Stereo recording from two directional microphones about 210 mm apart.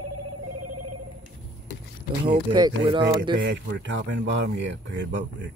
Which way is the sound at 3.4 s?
60° right (ahead or behind).